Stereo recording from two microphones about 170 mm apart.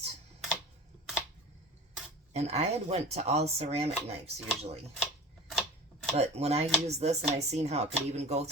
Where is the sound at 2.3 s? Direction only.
40° right (ahead or behind).